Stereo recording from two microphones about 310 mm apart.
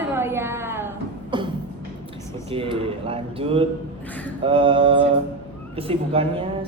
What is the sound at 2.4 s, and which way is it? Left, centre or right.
Speech, centre.